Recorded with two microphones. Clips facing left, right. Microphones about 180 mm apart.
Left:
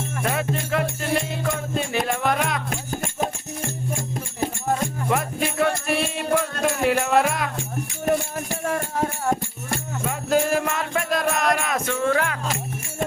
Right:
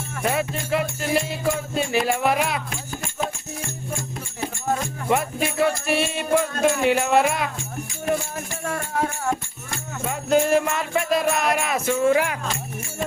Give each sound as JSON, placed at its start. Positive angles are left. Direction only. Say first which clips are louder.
{"t": 0.2, "sound": "music", "louder": "right 2 dB", "side_deg": -5}
{"t": 2.6, "sound": "music", "louder": "left 4 dB", "side_deg": 45}
{"t": 5.0, "sound": "music", "louder": "right 4 dB", "side_deg": 0}
{"t": 10.1, "sound": "music", "louder": "right 2 dB", "side_deg": 0}